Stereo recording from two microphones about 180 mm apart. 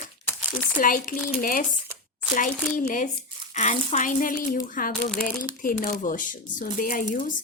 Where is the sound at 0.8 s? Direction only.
50° left (ahead or behind).